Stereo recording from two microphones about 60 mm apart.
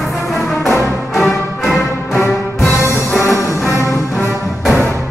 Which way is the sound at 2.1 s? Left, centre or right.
Left.